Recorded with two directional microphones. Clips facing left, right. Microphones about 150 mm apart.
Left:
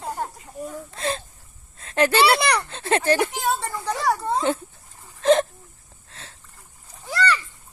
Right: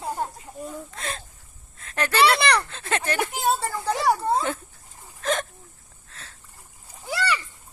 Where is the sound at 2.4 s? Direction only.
10° left (ahead or behind).